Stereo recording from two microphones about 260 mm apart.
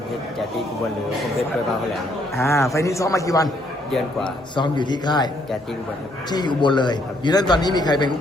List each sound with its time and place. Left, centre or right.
2.4 s a man's voice: centre
6.3 s a man's voice: centre